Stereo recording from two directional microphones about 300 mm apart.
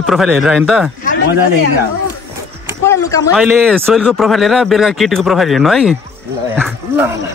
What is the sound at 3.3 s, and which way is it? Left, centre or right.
Speech, centre.